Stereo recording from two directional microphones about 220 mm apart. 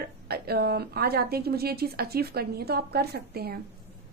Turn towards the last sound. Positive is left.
turn(degrees=-45)  # may be behind; listen again after turning